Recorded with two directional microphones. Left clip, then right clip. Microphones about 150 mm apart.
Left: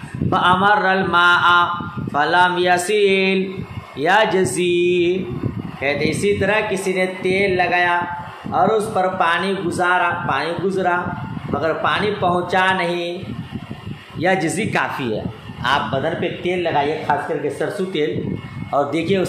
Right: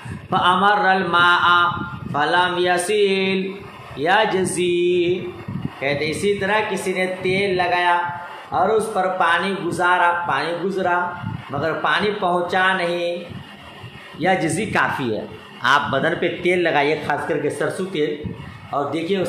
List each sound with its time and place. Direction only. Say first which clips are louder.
0.3 s a man's voice: left 1 dB; 20° left (ahead or behind)
14.2 s speech: left 1 dB; 5° left (ahead or behind)
15.6 s a man's voice: right 2 dB; 15° right (ahead or behind)
18.0 s a man's voice: even; 25° left (ahead or behind)
18.7 s speech: left 3 dB; 40° left (ahead or behind)